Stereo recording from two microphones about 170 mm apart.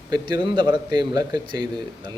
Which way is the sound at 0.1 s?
25° right (ahead or behind).